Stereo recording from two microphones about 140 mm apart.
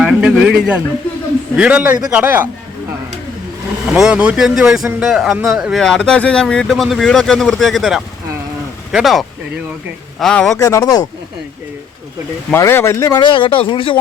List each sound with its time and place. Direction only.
0.0 s a sound: 5° right (ahead or behind)
1.5 s speech: 10° right (ahead or behind)
3.9 s speech: 5° right (ahead or behind)
10.6 s speech: 25° left (ahead or behind)
12.5 s speech: 20° left (ahead or behind); by 14.0 s 40° left (ahead or behind)